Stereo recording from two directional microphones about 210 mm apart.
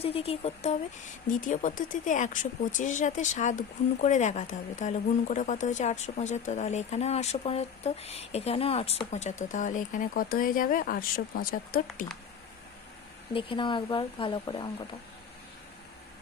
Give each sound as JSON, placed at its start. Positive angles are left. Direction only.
{"t": 0.0, "sound": "speech", "side_deg": 30}
{"t": 13.3, "sound": "speech", "side_deg": 25}